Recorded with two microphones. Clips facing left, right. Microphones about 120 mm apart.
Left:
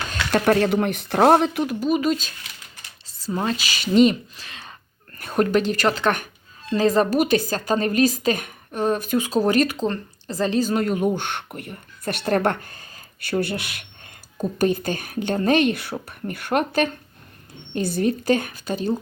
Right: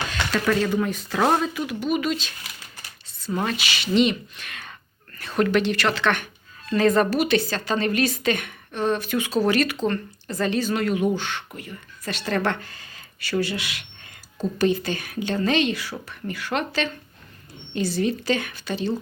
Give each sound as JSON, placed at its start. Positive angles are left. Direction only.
{"t": 0.1, "sound": "speech", "side_deg": 50}
{"t": 1.8, "sound": "a woman's voice", "side_deg": 35}
{"t": 3.3, "sound": "speech", "side_deg": 30}
{"t": 3.7, "sound": "a woman's voice", "side_deg": 40}
{"t": 5.2, "sound": "a woman's voice", "side_deg": 45}
{"t": 11.1, "sound": "speech", "side_deg": 55}